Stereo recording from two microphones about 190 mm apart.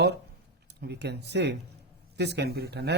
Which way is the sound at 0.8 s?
60° right (ahead or behind).